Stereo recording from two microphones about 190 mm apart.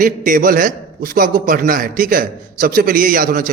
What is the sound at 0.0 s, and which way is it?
Mantra, 45° right (ahead or behind).